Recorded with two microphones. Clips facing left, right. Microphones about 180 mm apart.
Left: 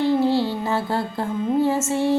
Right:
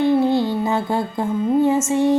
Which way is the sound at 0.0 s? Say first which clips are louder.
Right 2 dB; 15° right (ahead or behind).